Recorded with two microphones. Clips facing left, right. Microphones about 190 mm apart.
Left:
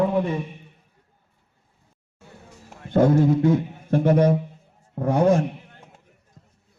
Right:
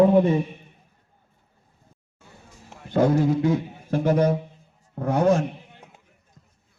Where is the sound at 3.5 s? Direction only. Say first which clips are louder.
Left 3 dB; 55° left (ahead or behind).